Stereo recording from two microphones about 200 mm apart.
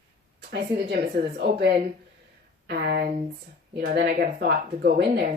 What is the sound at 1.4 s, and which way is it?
Speech, 55° right (ahead or behind).